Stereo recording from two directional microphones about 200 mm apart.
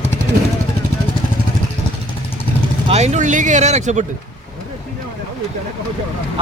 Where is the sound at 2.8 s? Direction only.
35° right (ahead or behind).